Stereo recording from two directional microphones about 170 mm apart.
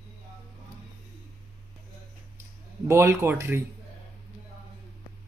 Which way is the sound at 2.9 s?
15° right (ahead or behind).